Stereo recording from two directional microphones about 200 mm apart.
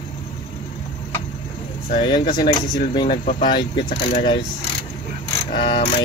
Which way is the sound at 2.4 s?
25° left (ahead or behind).